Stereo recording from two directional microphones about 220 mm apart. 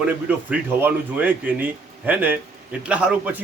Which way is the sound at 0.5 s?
10° right (ahead or behind).